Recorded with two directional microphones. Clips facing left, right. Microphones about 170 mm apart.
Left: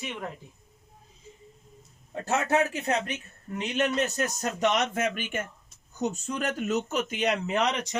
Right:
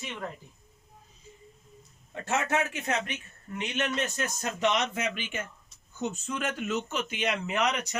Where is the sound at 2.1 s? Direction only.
35° left (ahead or behind).